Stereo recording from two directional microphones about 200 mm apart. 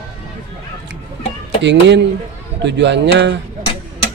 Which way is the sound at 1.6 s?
60° right (ahead or behind).